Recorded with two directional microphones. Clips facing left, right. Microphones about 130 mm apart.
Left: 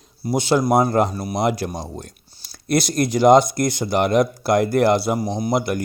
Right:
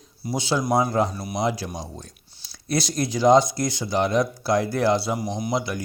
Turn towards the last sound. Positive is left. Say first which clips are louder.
# left 5 dB
turn(degrees=55)  # may be behind; listen again after turning